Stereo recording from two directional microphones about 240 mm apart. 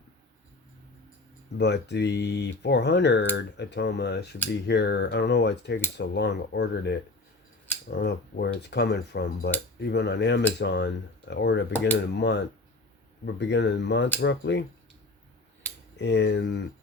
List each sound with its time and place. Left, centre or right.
1.5 s speech: left
16.0 s speech: left